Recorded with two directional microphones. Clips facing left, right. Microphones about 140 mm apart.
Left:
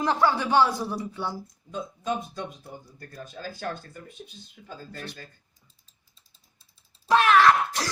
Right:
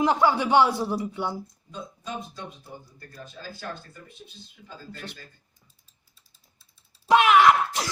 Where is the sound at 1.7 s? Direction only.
50° left (ahead or behind).